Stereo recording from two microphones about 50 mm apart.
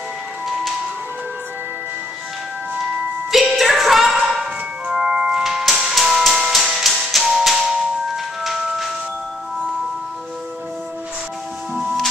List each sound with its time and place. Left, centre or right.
3.4 s music: centre
4.8 s organ: centre
5.4 s music: centre